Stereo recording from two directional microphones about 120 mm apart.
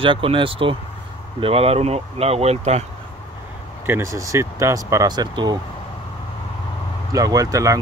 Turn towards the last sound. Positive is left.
turn(degrees=-25)  # may be behind; listen again after turning